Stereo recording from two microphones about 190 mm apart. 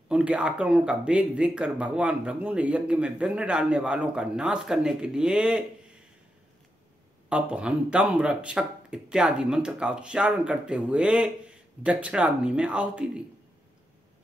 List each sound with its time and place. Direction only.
0.1 s speech: 5° right (ahead or behind)
7.2 s speech: 5° right (ahead or behind)